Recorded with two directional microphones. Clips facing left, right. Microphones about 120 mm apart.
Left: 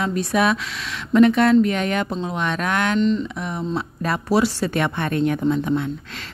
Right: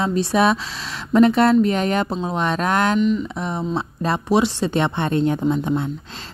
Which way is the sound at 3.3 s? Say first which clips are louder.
Right 2 dB; 30° right (ahead or behind).